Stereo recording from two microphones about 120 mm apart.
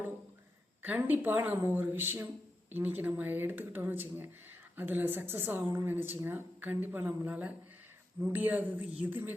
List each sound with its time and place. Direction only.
0.8 s speech: 15° right (ahead or behind)